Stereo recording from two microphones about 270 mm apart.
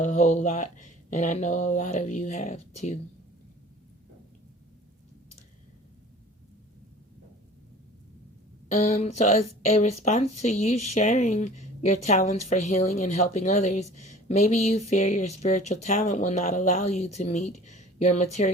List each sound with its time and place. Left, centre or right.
0.0 s a woman's voice: left
8.7 s a woman's voice: left